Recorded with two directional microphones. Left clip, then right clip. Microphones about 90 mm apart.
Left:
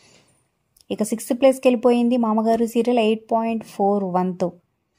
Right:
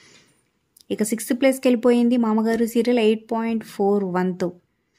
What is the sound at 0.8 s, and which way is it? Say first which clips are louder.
A woman's voice: even; 35° left (ahead or behind).